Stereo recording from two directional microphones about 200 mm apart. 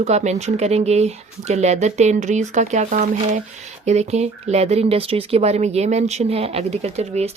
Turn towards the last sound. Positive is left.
turn(degrees=-35)  # may be behind; listen again after turning